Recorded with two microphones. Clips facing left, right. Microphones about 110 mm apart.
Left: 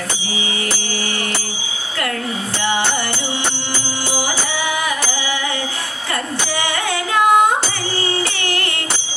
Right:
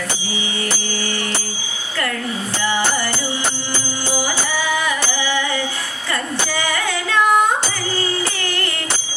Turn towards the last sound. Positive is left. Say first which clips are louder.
# left 2 dB
turn(degrees=20)  # may be behind; listen again after turning